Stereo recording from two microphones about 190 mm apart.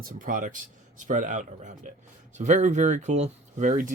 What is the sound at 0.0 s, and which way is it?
Speech, 45° right (ahead or behind).